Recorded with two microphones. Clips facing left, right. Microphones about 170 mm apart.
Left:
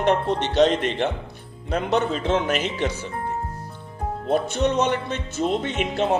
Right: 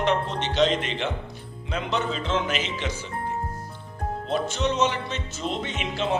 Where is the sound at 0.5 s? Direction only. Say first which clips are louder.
Left 4 dB; 50° left (ahead or behind).